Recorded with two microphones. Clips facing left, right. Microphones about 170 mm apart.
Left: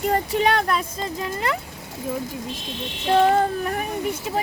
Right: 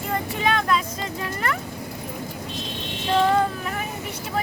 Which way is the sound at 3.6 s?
40° left (ahead or behind).